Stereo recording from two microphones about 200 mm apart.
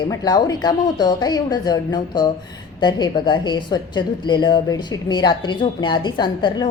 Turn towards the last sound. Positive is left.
turn(degrees=20)  # may be behind; listen again after turning